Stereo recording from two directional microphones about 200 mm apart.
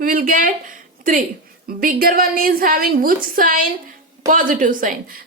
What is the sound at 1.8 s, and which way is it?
A woman's voice, 45° right (ahead or behind).